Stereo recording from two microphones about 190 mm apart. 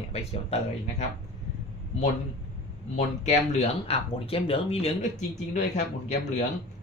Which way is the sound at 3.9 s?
30° left (ahead or behind).